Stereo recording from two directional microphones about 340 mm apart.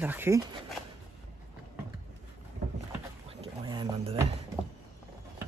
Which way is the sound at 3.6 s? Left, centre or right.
Centre.